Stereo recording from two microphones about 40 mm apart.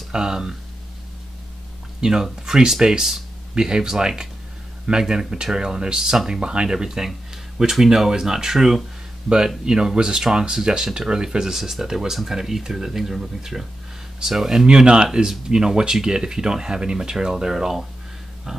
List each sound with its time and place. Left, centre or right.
0.1 s speech: centre
2.0 s speech: centre
18.5 s a sound: centre